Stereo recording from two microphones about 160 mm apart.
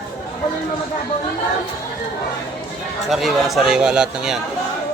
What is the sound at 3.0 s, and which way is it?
Speech, centre (ahead or behind).